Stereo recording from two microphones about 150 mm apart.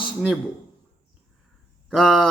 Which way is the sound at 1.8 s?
Centre (ahead or behind).